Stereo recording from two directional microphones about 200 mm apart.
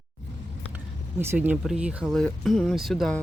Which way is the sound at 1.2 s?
10° right (ahead or behind).